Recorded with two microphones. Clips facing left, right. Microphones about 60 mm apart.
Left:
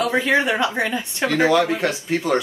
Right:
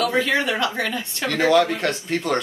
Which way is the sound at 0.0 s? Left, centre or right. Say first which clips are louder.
Left 2 dB; centre.